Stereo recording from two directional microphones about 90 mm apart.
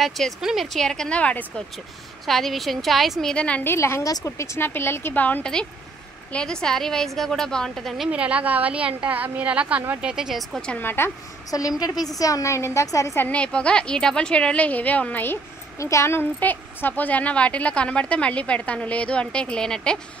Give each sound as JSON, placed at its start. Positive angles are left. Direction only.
{"t": 0.0, "sound": "speech", "side_deg": 0}
{"t": 2.2, "sound": "speech", "side_deg": 0}
{"t": 3.6, "sound": "a woman's voice", "side_deg": 30}
{"t": 6.3, "sound": "a woman's voice", "side_deg": 10}
{"t": 8.1, "sound": "a woman's voice", "side_deg": -15}
{"t": 10.7, "sound": "speech", "side_deg": 25}
{"t": 11.8, "sound": "a woman's voice", "side_deg": 45}
{"t": 13.2, "sound": "a woman's voice", "side_deg": 15}
{"t": 15.8, "sound": "a woman's voice", "side_deg": 30}